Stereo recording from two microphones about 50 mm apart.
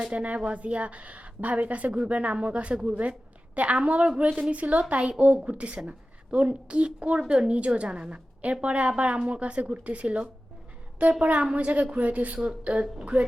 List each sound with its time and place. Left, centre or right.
0.1 s a woman's voice: right